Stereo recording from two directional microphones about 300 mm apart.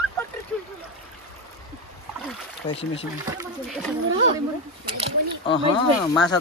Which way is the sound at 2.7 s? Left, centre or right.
Centre.